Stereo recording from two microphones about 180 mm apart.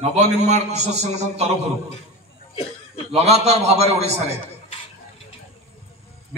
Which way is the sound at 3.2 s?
35° right (ahead or behind).